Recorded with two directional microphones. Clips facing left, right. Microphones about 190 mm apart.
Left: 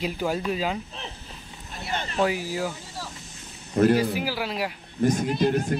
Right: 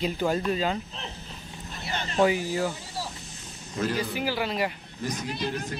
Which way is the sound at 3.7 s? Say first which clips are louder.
Left 9 dB; 55° left (ahead or behind).